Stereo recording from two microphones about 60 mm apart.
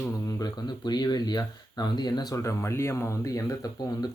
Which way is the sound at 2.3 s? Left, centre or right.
Left.